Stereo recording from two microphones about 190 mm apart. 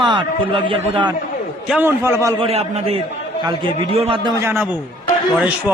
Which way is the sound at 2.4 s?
30° right (ahead or behind).